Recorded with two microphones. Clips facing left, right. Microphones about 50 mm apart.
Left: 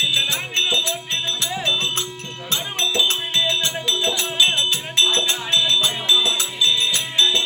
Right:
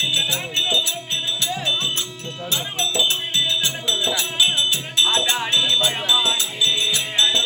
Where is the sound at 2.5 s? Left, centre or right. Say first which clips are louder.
Left 1 dB; left.